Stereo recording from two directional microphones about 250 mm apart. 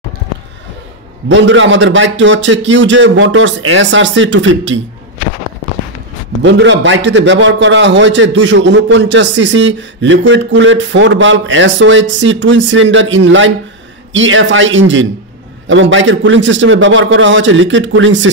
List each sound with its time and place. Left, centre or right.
1.3 s a man's voice: right
6.4 s a man's voice: right